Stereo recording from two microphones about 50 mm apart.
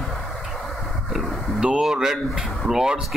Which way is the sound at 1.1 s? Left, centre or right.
Centre.